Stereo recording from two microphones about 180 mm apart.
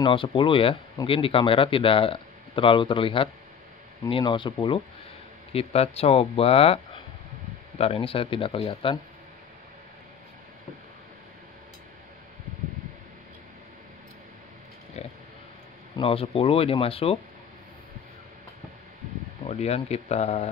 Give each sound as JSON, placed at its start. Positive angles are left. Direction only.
{"t": 0.0, "sound": "speech", "side_deg": 30}
{"t": 15.0, "sound": "pig", "side_deg": 35}
{"t": 16.0, "sound": "speech", "side_deg": 30}
{"t": 19.4, "sound": "speech", "side_deg": 35}